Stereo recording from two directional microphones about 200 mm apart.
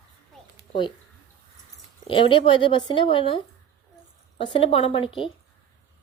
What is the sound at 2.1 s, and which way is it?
Speech, 25° left (ahead or behind).